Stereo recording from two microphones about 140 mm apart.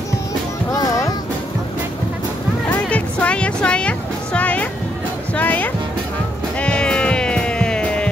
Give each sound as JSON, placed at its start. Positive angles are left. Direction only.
{"t": 0.7, "sound": "music", "side_deg": 25}
{"t": 2.7, "sound": "music", "side_deg": 10}